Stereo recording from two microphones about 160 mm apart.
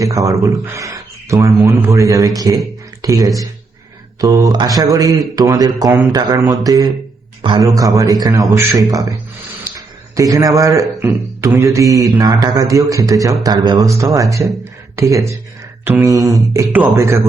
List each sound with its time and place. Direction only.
0.0 s speech: 20° right (ahead or behind)
10.2 s a man's voice: 20° right (ahead or behind)